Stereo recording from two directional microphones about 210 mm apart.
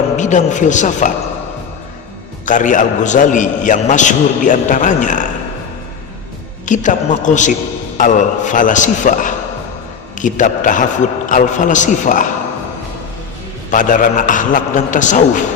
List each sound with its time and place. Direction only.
0.2 s a man's voice: 35° left (ahead or behind)
2.5 s a man's voice: 35° left (ahead or behind)
6.7 s a man's voice: 35° left (ahead or behind)
13.7 s a man's voice: 40° left (ahead or behind)